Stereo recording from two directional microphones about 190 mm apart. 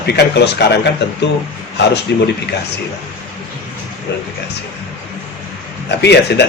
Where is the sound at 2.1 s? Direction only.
60° left (ahead or behind).